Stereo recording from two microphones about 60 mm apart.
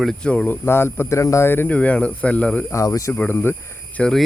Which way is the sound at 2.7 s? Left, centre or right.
Left.